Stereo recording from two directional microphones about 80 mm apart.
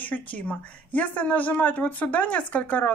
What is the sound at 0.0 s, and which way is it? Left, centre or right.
Speech, left.